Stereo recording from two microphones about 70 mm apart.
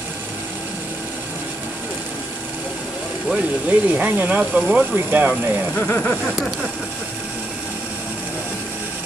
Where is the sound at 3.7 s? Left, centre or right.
Right.